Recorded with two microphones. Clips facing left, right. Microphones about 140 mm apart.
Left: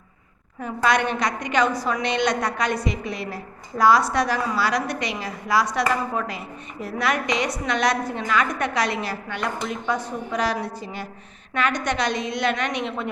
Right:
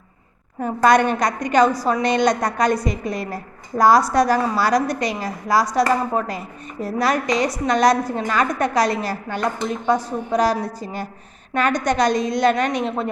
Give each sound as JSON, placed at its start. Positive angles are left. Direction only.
{"t": 0.6, "sound": "a woman's voice", "side_deg": -40}